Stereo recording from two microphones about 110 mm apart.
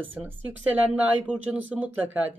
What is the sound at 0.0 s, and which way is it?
Speech, 15° right (ahead or behind).